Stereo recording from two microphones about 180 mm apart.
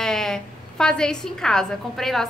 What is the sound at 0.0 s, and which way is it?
A woman's voice, 5° left (ahead or behind).